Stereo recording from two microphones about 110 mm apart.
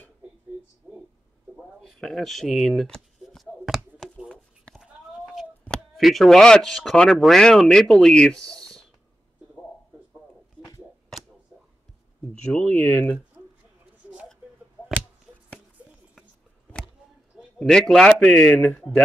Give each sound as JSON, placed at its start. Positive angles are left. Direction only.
{"t": 1.8, "sound": "a sound", "side_deg": 5}
{"t": 12.5, "sound": "speech", "side_deg": 15}
{"t": 17.6, "sound": "a man's voice", "side_deg": 5}